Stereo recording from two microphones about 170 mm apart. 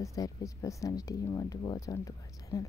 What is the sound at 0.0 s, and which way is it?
A woman's voice, 20° left (ahead or behind).